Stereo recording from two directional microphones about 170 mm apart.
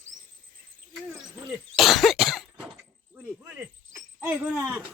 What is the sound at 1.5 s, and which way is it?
Throat clearing, centre (ahead or behind).